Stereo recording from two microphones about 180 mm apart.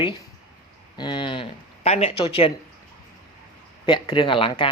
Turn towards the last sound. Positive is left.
turn(degrees=30)  # may be behind; listen again after turning